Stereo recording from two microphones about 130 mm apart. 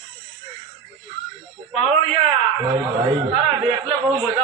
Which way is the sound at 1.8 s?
45° right (ahead or behind).